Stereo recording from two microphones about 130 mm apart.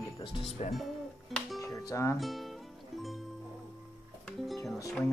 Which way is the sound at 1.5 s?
25° left (ahead or behind).